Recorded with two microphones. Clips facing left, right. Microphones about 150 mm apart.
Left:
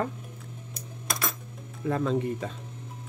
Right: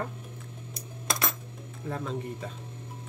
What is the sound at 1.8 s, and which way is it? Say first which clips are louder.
Speech: left 7 dB; 90° left.